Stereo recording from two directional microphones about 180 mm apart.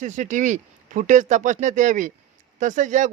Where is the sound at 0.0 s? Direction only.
45° right (ahead or behind).